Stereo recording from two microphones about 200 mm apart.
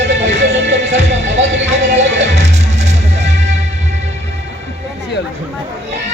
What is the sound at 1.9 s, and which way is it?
Music, 35° right (ahead or behind).